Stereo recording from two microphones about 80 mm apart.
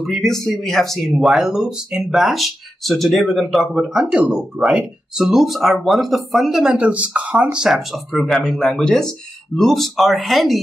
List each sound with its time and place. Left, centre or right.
0.0 s speech: centre
6.7 s speech: centre
7.5 s speech: centre